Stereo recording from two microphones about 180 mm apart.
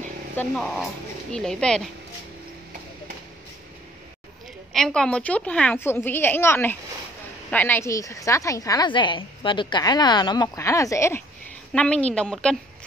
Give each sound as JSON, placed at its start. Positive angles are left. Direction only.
{"t": 0.4, "sound": "speech", "side_deg": 5}
{"t": 4.7, "sound": "a woman's voice", "side_deg": 5}